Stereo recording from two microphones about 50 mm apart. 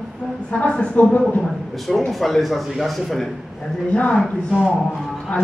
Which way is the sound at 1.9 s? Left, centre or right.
Centre.